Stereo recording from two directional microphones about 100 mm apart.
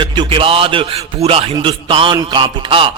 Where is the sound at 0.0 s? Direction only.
55° right (ahead or behind); by 1.5 s 80° right.